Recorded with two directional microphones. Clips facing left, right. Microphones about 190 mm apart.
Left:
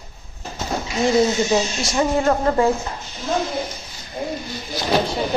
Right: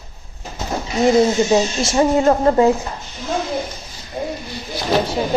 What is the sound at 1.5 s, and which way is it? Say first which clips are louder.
Speech: right 4 dB; 25° right (ahead or behind).